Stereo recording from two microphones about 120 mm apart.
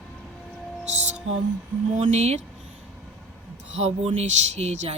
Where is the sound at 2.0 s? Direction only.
70° right (ahead or behind).